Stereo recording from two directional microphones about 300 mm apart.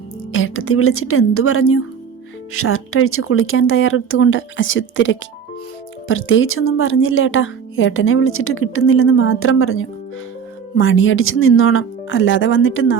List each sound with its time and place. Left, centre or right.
0.3 s speech: left